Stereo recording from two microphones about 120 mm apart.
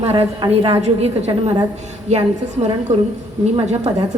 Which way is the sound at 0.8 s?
60° right (ahead or behind).